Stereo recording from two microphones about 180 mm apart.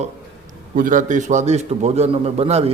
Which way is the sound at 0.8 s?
45° right (ahead or behind).